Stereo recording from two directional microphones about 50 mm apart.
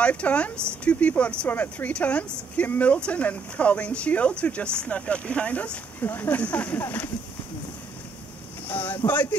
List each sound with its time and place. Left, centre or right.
0.0 s speech: left
1.5 s speech: left
2.0 s speech: left
5.9 s speech: left
6.3 s speech: left
8.6 s speech: left